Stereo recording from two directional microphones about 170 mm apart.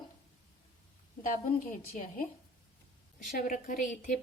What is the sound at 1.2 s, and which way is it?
A woman's voice, 55° left (ahead or behind).